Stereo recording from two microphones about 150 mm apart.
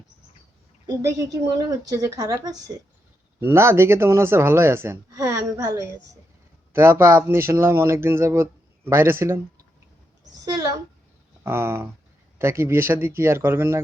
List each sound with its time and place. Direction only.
0.9 s speech: 20° right (ahead or behind)
11.4 s speech: 15° right (ahead or behind)